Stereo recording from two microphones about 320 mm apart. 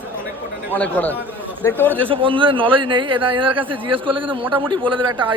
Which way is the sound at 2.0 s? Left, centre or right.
Centre.